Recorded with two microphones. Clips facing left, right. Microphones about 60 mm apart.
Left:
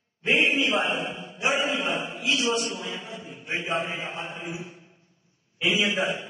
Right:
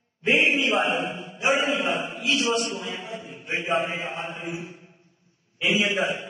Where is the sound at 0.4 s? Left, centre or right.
Right.